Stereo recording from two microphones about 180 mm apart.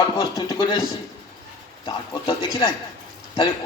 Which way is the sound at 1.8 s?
25° left (ahead or behind).